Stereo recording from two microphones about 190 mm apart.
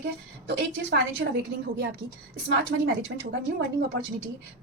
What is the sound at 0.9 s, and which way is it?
A woman's voice, 60° right (ahead or behind).